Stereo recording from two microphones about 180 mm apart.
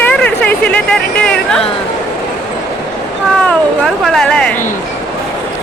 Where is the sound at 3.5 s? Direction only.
Centre (ahead or behind).